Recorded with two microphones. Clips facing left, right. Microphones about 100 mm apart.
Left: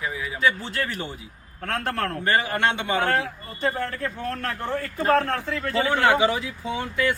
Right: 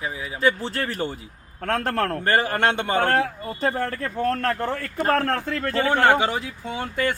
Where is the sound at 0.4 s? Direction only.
40° right (ahead or behind).